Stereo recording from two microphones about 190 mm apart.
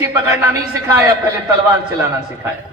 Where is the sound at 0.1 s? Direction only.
15° right (ahead or behind).